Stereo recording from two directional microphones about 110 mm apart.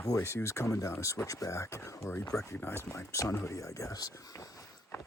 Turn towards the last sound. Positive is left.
turn(degrees=30)  # may be behind; listen again after turning